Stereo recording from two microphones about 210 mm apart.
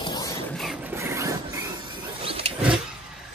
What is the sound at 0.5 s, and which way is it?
Mechanisms, centre (ahead or behind).